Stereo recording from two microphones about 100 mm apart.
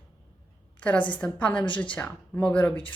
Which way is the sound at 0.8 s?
15° left (ahead or behind).